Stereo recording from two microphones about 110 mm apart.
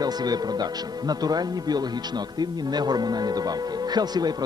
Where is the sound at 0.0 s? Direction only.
35° right (ahead or behind).